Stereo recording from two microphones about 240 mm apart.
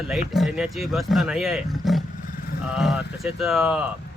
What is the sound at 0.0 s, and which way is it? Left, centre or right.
Speech, centre.